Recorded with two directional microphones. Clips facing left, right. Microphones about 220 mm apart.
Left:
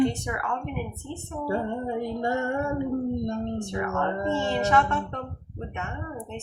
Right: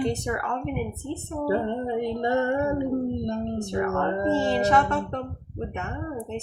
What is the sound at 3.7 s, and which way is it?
Speech, 35° right (ahead or behind).